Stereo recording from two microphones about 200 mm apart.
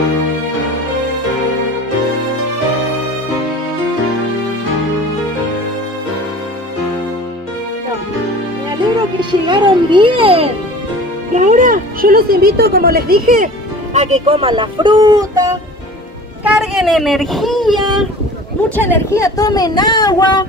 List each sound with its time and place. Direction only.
8.9 s music: 25° right (ahead or behind)
11.3 s a sound: 40° right (ahead or behind)
13.9 s speech: 30° right (ahead or behind)
16.4 s speech: 5° right (ahead or behind)
18.8 s speech: 10° left (ahead or behind)